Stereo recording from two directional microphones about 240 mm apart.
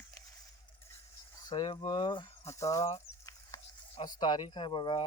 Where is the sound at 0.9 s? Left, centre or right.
Centre.